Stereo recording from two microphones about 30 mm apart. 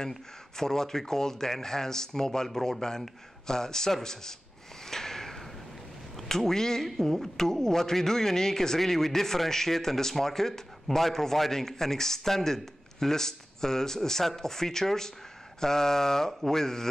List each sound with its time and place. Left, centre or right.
0.0 s a man's voice: centre
4.8 s a sound: centre
6.1 s speech: centre
7.0 s a man's voice: centre
7.3 s a man's voice: centre
16.3 s a sound: centre
16.5 s a man's voice: centre